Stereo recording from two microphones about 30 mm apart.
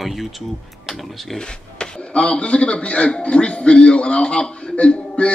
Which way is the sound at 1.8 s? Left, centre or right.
Left.